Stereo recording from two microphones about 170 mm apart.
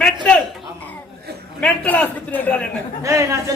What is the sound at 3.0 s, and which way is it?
Speech, 15° right (ahead or behind).